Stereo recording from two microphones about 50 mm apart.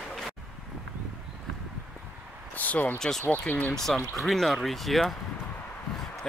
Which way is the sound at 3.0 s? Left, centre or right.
Centre.